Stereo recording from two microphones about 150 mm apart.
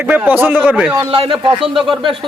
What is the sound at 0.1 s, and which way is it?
Speech, 15° right (ahead or behind).